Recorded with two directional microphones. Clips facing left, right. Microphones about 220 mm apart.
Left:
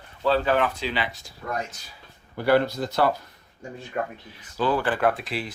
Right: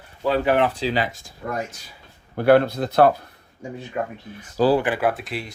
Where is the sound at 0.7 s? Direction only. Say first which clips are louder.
Right 5 dB; 35° right (ahead or behind).